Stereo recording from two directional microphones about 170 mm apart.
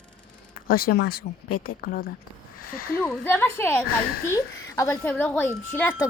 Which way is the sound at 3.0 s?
10° left (ahead or behind).